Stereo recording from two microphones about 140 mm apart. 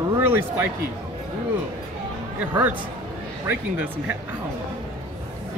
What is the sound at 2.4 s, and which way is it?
Speech, 15° right (ahead or behind).